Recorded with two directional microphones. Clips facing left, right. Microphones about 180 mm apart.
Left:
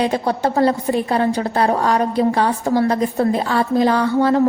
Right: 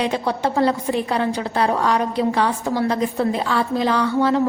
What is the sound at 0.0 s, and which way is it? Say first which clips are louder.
A woman's voice: left 3 dB; 40° left (ahead or behind).